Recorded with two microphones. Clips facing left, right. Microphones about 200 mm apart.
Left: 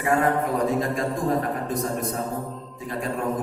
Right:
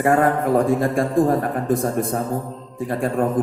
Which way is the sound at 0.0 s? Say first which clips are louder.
Right 5 dB; 50° right (ahead or behind).